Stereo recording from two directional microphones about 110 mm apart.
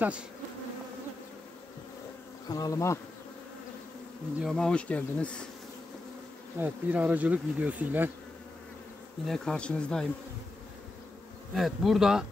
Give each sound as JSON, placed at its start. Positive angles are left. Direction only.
{"t": 2.4, "sound": "bee", "side_deg": 35}
{"t": 4.4, "sound": "bee", "side_deg": 5}
{"t": 6.6, "sound": "speech", "side_deg": -15}
{"t": 9.2, "sound": "speech", "side_deg": 5}
{"t": 11.5, "sound": "speech", "side_deg": 0}